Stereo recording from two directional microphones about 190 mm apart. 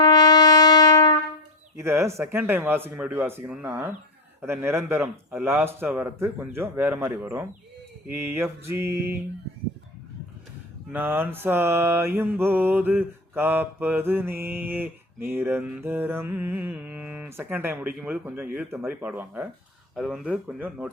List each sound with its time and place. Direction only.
0.0 s brass instrument: 20° left (ahead or behind)
1.7 s mantra: 15° right (ahead or behind)
10.9 s mantra: 10° right (ahead or behind)